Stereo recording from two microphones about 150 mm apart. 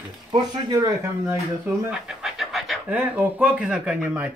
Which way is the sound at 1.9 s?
5° right (ahead or behind).